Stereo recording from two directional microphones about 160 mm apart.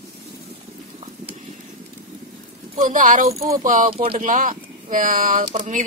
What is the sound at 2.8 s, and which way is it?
Speech, 55° right (ahead or behind).